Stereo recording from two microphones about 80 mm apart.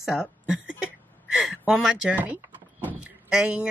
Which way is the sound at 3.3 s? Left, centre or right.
Centre.